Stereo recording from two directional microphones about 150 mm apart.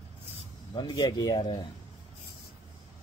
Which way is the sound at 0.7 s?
30° left (ahead or behind).